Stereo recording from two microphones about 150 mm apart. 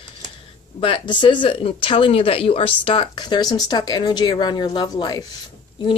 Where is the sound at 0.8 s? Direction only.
30° left (ahead or behind).